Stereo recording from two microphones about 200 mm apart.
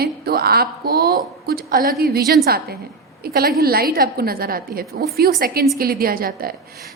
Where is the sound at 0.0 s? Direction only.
50° right (ahead or behind).